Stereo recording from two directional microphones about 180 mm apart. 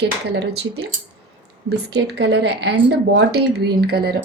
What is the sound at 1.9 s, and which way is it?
A woman's voice, 65° right (ahead or behind).